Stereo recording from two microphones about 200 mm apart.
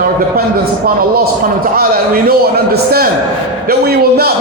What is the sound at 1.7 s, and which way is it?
A man's voice, 50° right (ahead or behind).